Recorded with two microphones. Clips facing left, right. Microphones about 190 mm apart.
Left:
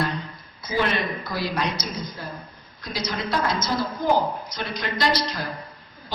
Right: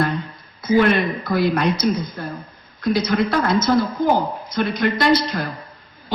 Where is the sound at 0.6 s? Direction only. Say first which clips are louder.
Right 8 dB; 55° right (ahead or behind).